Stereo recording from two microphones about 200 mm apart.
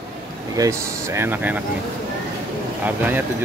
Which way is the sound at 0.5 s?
15° right (ahead or behind).